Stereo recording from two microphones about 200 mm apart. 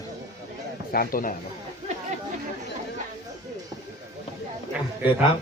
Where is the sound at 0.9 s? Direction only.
45° left (ahead or behind).